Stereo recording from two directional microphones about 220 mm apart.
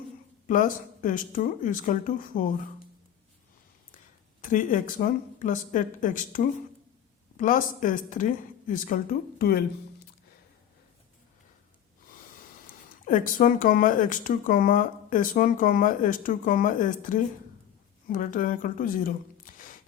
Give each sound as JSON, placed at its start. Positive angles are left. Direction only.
{"t": 0.4, "sound": "speech", "side_deg": 35}
{"t": 4.4, "sound": "speech", "side_deg": 35}
{"t": 12.6, "sound": "speech", "side_deg": 40}